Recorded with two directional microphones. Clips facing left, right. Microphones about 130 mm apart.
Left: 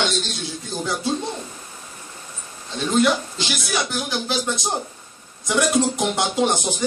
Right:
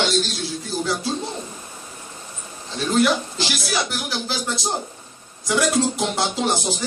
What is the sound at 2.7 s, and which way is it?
A man's voice, 20° left (ahead or behind).